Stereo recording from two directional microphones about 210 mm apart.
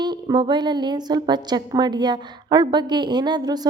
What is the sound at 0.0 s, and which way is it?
A woman's voice, 20° right (ahead or behind).